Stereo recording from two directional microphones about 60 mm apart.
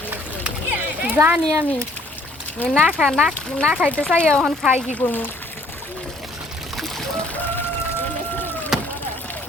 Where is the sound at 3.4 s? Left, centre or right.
Centre.